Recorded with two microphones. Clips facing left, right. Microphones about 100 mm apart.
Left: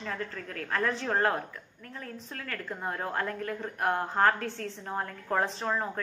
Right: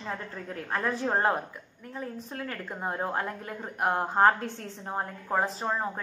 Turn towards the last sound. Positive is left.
turn(degrees=-10)  # may be behind; listen again after turning